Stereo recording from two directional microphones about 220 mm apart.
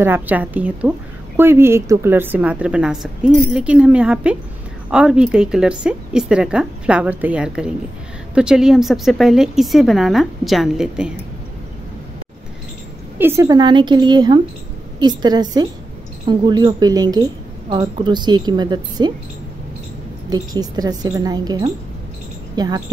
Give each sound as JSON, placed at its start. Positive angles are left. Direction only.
{"t": 0.0, "sound": "a woman's voice", "side_deg": -10}
{"t": 13.2, "sound": "a woman's voice", "side_deg": -10}
{"t": 20.2, "sound": "a woman's voice", "side_deg": -20}